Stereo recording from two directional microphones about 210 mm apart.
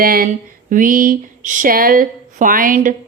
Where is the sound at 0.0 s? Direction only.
45° right (ahead or behind).